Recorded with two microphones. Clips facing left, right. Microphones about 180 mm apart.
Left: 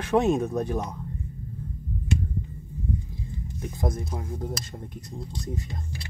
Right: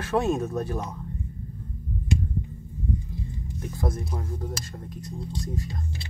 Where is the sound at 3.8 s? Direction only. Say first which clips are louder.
Even; 15° left (ahead or behind).